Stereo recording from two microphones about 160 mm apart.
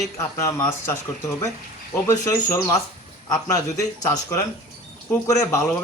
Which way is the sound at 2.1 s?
20° left (ahead or behind).